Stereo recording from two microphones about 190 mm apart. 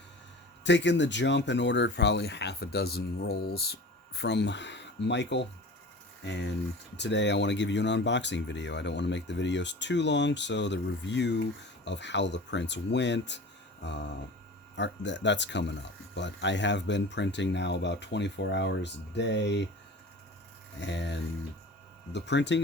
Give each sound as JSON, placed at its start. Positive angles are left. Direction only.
{"t": 0.6, "sound": "speech", "side_deg": 70}
{"t": 20.7, "sound": "speech", "side_deg": 65}